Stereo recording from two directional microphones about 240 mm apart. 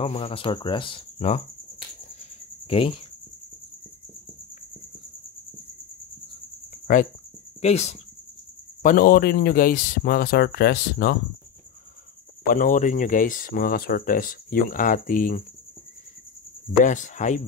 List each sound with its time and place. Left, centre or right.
0.0 s speech: left
2.6 s speech: left
7.6 s speech: left
8.8 s speech: left
12.4 s speech: left
16.8 s speech: left